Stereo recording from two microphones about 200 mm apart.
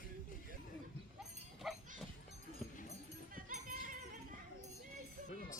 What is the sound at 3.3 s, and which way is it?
Music, 45° right (ahead or behind).